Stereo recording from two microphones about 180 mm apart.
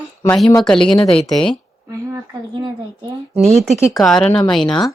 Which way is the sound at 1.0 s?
30° left (ahead or behind).